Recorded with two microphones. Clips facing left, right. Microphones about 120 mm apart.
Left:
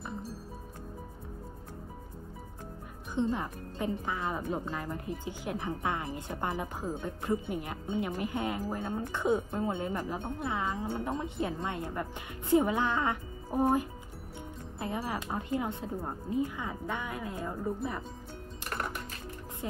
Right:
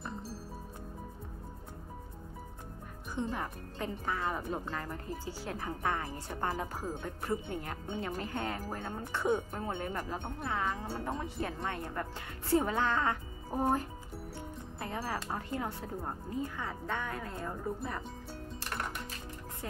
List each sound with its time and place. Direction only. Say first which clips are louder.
3.2 s a woman's voice: left 5 dB; 20° left (ahead or behind)
19.6 s speech: left 5 dB; 20° left (ahead or behind)